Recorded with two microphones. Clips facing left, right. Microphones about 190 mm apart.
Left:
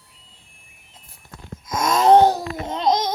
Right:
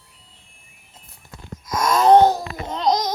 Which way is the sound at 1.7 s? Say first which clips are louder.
Right 1 dB; 20° left (ahead or behind).